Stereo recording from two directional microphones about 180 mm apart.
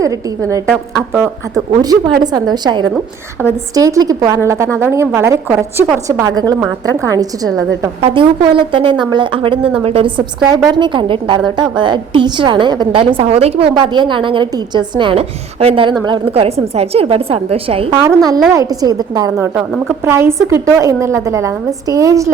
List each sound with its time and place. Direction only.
0.7 s a woman's voice: 10° right (ahead or behind)
1.8 s a woman's voice: 20° right (ahead or behind)
8.0 s a woman's voice: 30° right (ahead or behind)
18.5 s a woman's voice: 20° right (ahead or behind)
19.5 s a woman's voice: centre (ahead or behind)
19.9 s a woman's voice: 15° right (ahead or behind)